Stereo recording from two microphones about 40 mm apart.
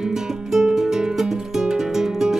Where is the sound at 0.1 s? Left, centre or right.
Centre.